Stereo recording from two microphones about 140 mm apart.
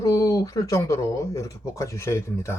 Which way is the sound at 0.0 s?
25° left (ahead or behind).